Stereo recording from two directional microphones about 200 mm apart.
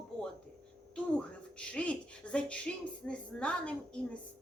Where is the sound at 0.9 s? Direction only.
5° left (ahead or behind).